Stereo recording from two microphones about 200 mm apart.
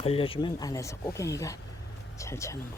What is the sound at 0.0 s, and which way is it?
Speech, 30° left (ahead or behind).